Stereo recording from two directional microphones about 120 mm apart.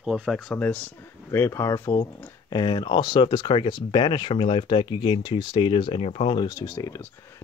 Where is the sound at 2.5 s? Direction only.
40° left (ahead or behind).